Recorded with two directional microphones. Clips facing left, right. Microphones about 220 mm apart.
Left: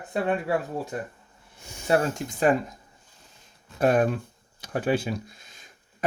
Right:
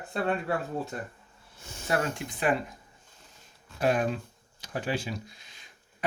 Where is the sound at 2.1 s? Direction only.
40° left (ahead or behind).